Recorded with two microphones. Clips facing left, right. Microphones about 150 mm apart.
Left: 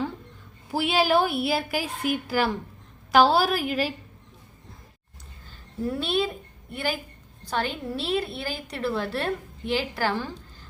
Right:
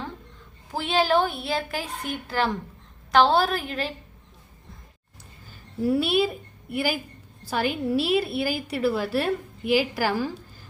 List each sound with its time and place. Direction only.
0.7 s a woman's voice: 10° left (ahead or behind)
5.8 s a woman's voice: 5° right (ahead or behind)